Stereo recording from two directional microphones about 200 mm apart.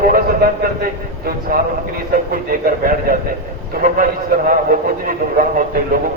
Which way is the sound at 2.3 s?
45° right (ahead or behind).